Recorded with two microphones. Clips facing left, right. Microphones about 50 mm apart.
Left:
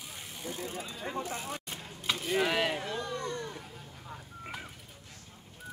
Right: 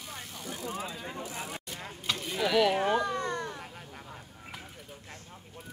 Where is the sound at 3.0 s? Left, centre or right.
Right.